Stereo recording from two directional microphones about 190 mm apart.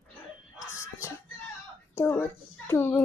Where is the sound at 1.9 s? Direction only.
10° left (ahead or behind).